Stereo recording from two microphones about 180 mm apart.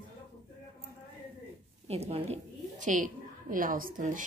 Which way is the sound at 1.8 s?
35° right (ahead or behind).